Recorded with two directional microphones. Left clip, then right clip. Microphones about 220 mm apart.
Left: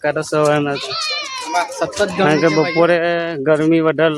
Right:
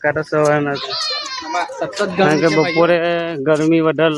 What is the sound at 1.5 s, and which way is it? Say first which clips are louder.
Speech: left 3 dB; 45° left (ahead or behind).